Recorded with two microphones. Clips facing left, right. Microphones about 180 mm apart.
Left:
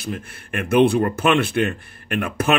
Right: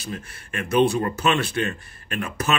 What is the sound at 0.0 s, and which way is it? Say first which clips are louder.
Speech: left 4 dB; 55° left (ahead or behind).